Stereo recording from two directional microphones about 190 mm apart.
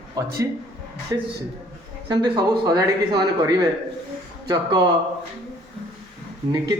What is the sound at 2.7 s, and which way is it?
Speech, 20° right (ahead or behind).